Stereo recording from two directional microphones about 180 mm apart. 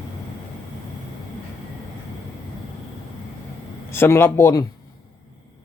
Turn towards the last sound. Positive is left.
turn(degrees=15)  # may be behind; listen again after turning